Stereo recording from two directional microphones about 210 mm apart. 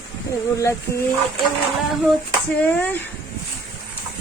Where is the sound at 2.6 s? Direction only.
10° left (ahead or behind).